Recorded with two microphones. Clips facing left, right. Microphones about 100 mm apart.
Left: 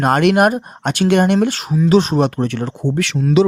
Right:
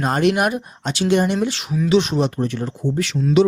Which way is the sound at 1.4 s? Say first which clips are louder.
Left 5 dB; 45° left (ahead or behind).